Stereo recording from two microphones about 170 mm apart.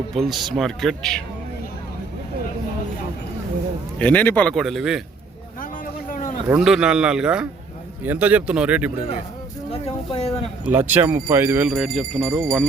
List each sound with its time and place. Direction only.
0.2 s a man's voice: centre (ahead or behind)
3.9 s a man's voice: 10° left (ahead or behind)
6.1 s a sound: 50° left (ahead or behind)
6.6 s a man's voice: 5° right (ahead or behind)
9.8 s a sound: 35° left (ahead or behind)
10.7 s speech: 10° right (ahead or behind)